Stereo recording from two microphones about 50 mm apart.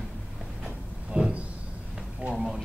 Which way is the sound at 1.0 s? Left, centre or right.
Centre.